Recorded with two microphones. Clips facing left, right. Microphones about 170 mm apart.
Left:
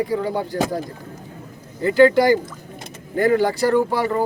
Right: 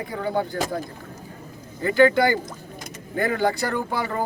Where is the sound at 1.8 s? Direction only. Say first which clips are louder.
Left 4 dB; 35° left (ahead or behind).